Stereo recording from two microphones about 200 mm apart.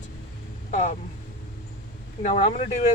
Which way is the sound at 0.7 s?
40° left (ahead or behind).